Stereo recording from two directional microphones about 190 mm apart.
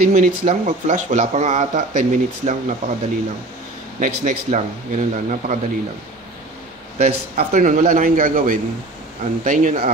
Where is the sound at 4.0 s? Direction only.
40° right (ahead or behind).